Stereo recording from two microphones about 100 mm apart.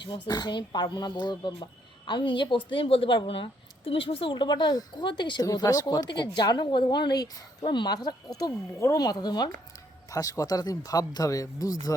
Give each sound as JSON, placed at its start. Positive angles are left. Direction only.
{"t": 0.1, "sound": "a woman's voice", "side_deg": 45}
{"t": 5.5, "sound": "a woman's voice", "side_deg": 40}
{"t": 7.6, "sound": "a woman's voice", "side_deg": 50}